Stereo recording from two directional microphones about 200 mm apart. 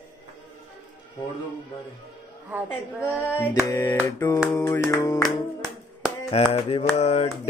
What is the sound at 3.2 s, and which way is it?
Music, 10° left (ahead or behind).